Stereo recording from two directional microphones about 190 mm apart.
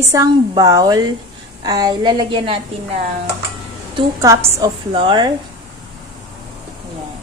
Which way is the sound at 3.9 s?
15° right (ahead or behind).